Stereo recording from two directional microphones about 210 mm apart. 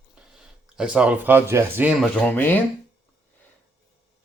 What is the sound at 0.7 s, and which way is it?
Speech, 5° right (ahead or behind).